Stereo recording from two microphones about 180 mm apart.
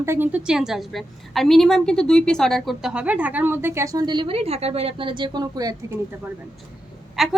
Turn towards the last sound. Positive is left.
turn(degrees=0)  # may be behind; listen again after turning